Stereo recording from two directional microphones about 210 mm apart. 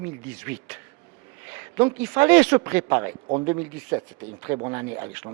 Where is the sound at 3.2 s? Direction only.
25° right (ahead or behind).